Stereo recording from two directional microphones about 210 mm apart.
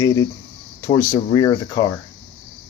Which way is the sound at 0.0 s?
15° left (ahead or behind).